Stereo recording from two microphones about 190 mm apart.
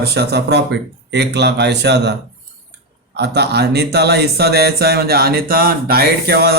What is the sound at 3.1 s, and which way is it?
Speech, 60° right (ahead or behind).